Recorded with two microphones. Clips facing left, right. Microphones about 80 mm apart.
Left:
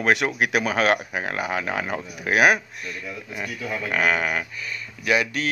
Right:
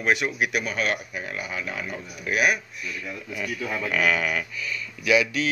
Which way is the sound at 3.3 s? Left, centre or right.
Left.